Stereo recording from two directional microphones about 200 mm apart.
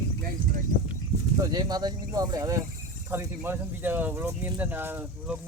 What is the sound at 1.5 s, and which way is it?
Speech, 20° right (ahead or behind).